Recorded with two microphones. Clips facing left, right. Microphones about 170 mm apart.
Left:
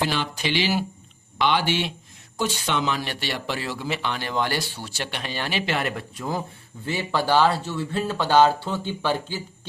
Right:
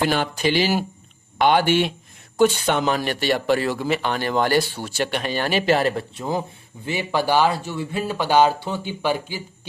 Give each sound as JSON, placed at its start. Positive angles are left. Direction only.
{"t": 0.0, "sound": "speech", "side_deg": -50}
{"t": 6.8, "sound": "speech", "side_deg": -15}